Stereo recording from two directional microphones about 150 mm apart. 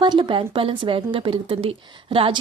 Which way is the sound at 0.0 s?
30° right (ahead or behind).